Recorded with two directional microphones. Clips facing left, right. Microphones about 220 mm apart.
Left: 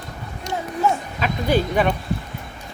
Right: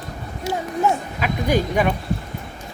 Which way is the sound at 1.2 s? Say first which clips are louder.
Even; 10° right (ahead or behind).